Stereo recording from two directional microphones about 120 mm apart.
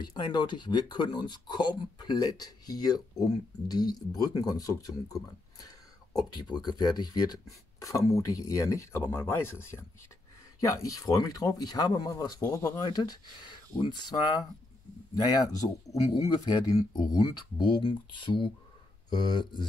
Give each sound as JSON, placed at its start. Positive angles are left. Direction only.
{"t": 0.0, "sound": "speech", "side_deg": 35}